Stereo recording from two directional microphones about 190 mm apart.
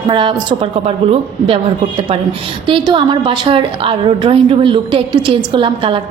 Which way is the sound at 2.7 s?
25° right (ahead or behind).